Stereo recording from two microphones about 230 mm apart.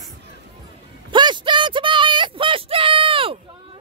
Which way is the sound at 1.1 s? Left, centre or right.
Centre.